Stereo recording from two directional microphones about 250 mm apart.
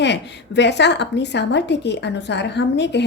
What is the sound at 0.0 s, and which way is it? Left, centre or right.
A woman's voice, left.